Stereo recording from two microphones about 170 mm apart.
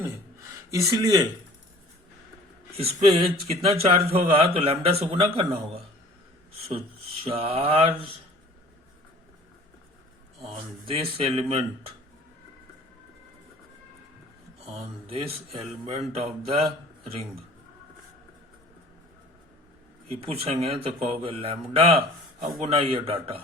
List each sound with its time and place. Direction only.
0.7 s speech: 20° right (ahead or behind)
2.7 s speech: 35° right (ahead or behind)
6.7 s speech: 35° right (ahead or behind)
10.4 s speech: 35° right (ahead or behind)
14.6 s a man's voice: 35° right (ahead or behind)
20.1 s speech: 35° right (ahead or behind)